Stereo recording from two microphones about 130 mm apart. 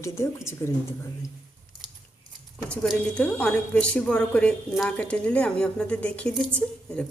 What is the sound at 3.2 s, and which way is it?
A woman's voice, 10° left (ahead or behind).